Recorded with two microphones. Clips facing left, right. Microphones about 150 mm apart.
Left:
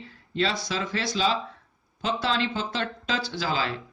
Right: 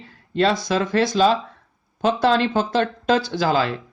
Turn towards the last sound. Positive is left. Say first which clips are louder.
# right 8 dB
turn(degrees=-50)  # may be behind; listen again after turning